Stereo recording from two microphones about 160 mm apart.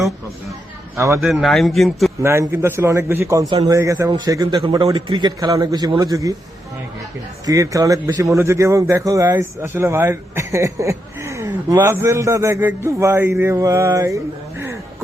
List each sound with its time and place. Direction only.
0.9 s a man's voice: 20° right (ahead or behind)
1.2 s a man's voice: centre (ahead or behind)
2.2 s a man's voice: 15° right (ahead or behind)
7.4 s a man's voice: 20° right (ahead or behind)